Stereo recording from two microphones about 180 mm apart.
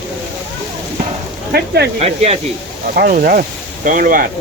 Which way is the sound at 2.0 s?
35° right (ahead or behind).